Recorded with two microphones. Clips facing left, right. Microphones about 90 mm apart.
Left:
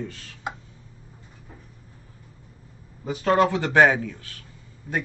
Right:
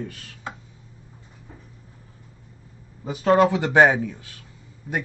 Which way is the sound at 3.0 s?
15° right (ahead or behind).